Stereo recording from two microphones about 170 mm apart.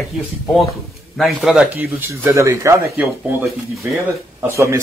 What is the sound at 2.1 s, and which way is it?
Speech, 15° right (ahead or behind).